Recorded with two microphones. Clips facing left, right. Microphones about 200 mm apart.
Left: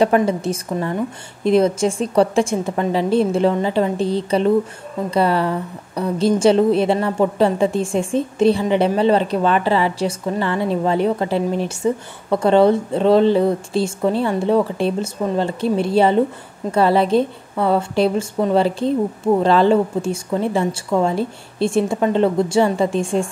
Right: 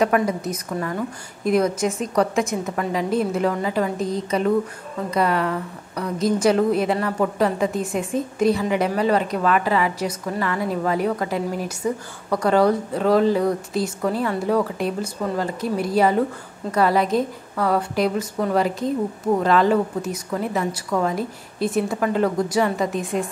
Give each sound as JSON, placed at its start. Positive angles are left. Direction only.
{"t": 0.0, "sound": "a woman's voice", "side_deg": 30}